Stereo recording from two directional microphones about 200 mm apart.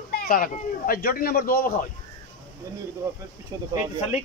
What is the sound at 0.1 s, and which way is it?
Speech, 45° left (ahead or behind).